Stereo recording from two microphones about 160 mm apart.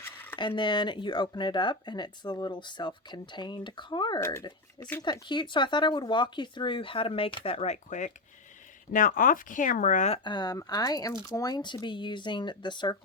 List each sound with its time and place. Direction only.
0.0 s a sound: 10° left (ahead or behind)
0.3 s speech: 30° left (ahead or behind)
4.2 s speech: 15° left (ahead or behind)
5.0 s speech: 30° left (ahead or behind); by 10.2 s 50° left (ahead or behind)
10.2 s speech: 25° left (ahead or behind)